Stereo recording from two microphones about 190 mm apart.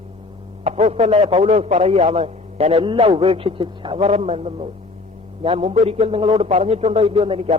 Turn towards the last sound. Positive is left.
turn(degrees=-30)  # may be behind; listen again after turning